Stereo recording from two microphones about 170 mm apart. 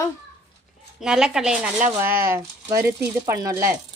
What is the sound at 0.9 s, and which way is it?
A child's voice, 5° right (ahead or behind).